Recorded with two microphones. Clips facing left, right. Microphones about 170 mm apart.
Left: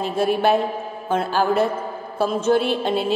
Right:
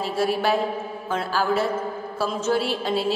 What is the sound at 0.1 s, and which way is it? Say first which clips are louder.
Speech: left 4 dB; 55° left (ahead or behind).